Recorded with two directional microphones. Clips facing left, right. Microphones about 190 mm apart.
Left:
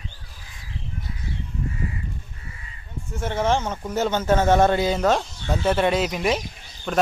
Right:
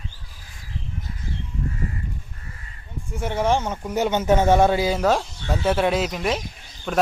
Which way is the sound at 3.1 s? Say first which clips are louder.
Right 1 dB; 10° right (ahead or behind).